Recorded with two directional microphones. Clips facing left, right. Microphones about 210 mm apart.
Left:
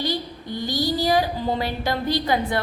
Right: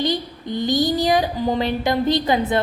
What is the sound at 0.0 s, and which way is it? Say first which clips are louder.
A woman's voice: right 4 dB; 20° right (ahead or behind).